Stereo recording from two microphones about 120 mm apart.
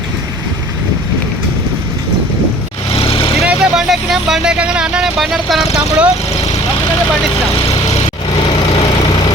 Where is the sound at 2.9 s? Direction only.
55° left (ahead or behind).